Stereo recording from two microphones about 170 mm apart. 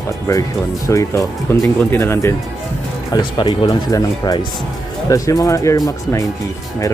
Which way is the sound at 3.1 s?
25° left (ahead or behind).